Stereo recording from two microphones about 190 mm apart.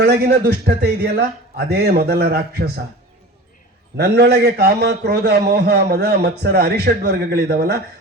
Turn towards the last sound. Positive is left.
turn(degrees=-55)  # may be behind; listen again after turning